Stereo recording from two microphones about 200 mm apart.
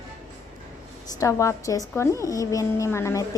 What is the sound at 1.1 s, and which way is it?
A woman's voice, 15° left (ahead or behind).